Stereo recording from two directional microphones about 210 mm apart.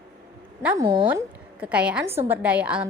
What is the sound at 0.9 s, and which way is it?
Speech, 20° right (ahead or behind).